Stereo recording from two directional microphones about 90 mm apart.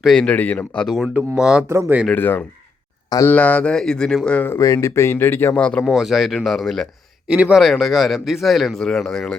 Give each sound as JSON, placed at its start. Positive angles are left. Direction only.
{"t": 0.0, "sound": "speech", "side_deg": 5}
{"t": 0.8, "sound": "speech", "side_deg": 0}
{"t": 1.6, "sound": "speech", "side_deg": -30}
{"t": 2.1, "sound": "speech", "side_deg": 20}
{"t": 4.4, "sound": "speech", "side_deg": 25}
{"t": 4.6, "sound": "speech", "side_deg": 35}
{"t": 5.5, "sound": "speech", "side_deg": 10}
{"t": 5.8, "sound": "speech", "side_deg": 0}
{"t": 7.3, "sound": "speech", "side_deg": -10}
{"t": 7.6, "sound": "speech", "side_deg": 0}